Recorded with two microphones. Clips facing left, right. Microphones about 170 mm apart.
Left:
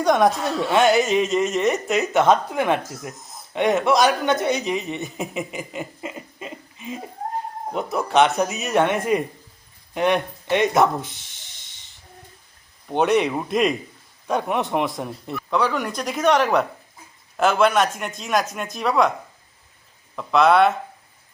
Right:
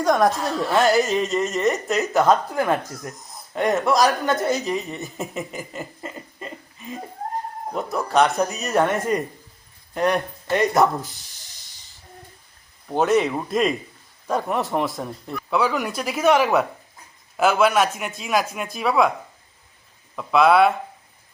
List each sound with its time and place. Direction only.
0.0 s speech: centre (ahead or behind)
5.1 s chuckle: 15° left (ahead or behind)
7.7 s speech: centre (ahead or behind)
12.9 s speech: centre (ahead or behind)
20.1 s speech: 5° right (ahead or behind)